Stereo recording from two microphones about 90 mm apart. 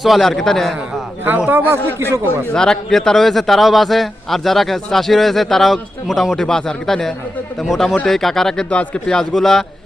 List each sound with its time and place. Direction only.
0.0 s a man's voice: centre (ahead or behind)
1.4 s a man's voice: 20° right (ahead or behind)
2.6 s a man's voice: 5° left (ahead or behind)